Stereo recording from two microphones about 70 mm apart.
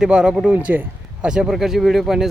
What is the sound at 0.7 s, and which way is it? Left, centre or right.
Speech, right.